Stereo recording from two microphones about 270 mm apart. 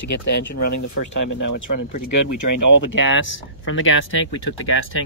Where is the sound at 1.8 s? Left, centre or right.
Left.